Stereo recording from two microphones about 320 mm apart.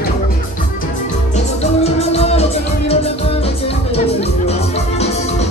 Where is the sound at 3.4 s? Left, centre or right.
Centre.